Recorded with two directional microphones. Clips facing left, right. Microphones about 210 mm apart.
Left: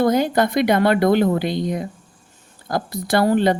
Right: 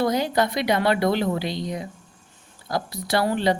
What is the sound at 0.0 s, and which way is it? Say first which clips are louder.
A woman's voice: left 5 dB; 50° left (ahead or behind).